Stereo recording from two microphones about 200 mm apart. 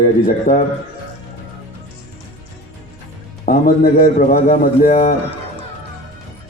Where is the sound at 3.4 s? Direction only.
45° left (ahead or behind).